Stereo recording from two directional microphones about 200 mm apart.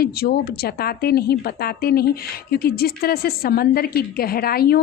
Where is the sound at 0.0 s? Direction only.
50° left (ahead or behind).